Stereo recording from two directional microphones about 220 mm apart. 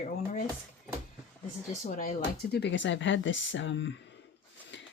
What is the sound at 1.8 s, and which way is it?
Speech, 40° left (ahead or behind).